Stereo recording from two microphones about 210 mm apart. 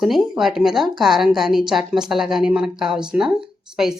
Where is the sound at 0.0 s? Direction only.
Centre (ahead or behind).